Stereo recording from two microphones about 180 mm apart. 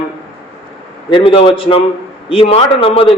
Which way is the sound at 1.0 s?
30° left (ahead or behind).